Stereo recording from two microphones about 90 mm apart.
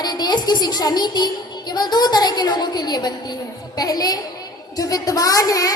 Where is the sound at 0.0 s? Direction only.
50° left (ahead or behind).